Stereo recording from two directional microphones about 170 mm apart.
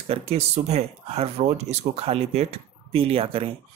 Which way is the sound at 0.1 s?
35° right (ahead or behind).